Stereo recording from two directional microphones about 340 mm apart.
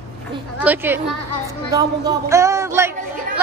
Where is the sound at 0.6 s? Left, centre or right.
Centre.